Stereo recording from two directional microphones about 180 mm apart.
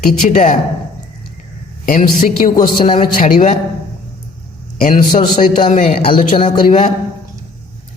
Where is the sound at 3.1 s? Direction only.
50° left (ahead or behind).